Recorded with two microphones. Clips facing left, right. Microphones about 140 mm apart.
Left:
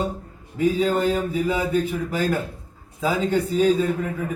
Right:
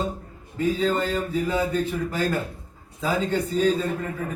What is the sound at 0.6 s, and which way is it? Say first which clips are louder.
A man's voice: left 3 dB; 10° left (ahead or behind).